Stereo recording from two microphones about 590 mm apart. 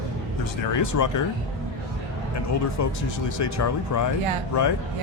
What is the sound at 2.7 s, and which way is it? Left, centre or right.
Speech, left.